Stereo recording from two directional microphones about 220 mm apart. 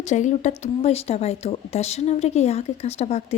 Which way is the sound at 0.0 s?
30° left (ahead or behind).